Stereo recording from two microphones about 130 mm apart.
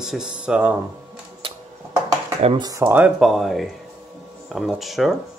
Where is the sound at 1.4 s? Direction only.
45° right (ahead or behind).